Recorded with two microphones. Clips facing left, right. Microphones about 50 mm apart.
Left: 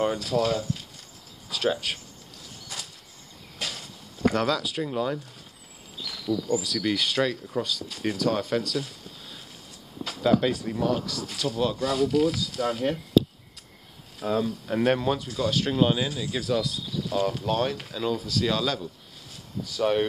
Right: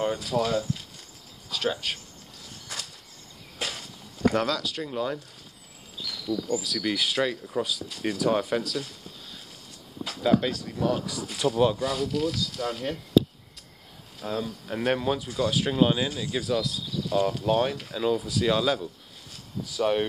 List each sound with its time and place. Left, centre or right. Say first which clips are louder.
0.2 s speech: left 1 dB; centre
1.5 s speech: left 2 dB; centre
3.5 s a sound: right 1 dB; centre
4.4 s speech: left 2 dB; centre
6.0 s insect: left 2 dB; centre
6.5 s speech: left 2 dB; centre
10.0 s a sound: left 1 dB; centre
10.5 s speech: left 5 dB; centre
11.3 s speech: right 4 dB; centre
11.8 s speech: left 4 dB; centre
14.2 s speech: left 5 dB; centre